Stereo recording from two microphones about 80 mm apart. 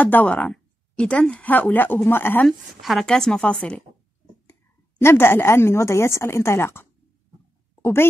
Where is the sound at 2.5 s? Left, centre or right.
Centre.